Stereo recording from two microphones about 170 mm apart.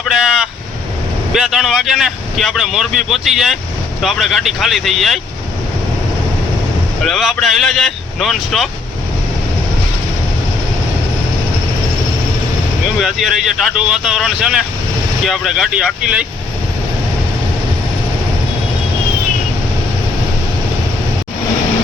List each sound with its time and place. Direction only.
0.1 s a sound: 5° right (ahead or behind)
1.3 s speech: 5° right (ahead or behind)
7.0 s speech: centre (ahead or behind)
13.0 s speech: centre (ahead or behind)